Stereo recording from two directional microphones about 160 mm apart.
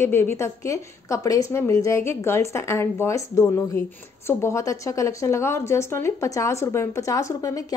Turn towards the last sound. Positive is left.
turn(degrees=20)  # may be behind; listen again after turning